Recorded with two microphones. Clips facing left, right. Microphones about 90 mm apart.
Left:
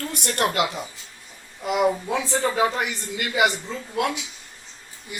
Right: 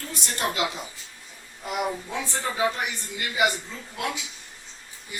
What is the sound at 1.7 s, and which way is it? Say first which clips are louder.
Speech: left 7 dB; 90° left.